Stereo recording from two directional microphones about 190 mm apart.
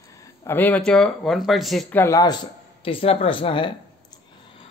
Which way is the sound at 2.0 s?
20° left (ahead or behind).